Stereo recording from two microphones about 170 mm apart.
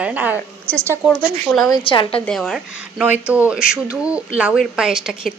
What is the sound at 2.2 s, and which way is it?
A woman's voice, 5° left (ahead or behind).